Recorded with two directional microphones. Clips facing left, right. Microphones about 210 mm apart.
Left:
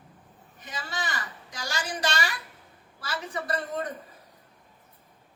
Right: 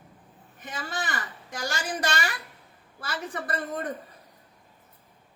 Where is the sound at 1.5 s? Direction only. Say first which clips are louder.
Right 3 dB; 50° right (ahead or behind).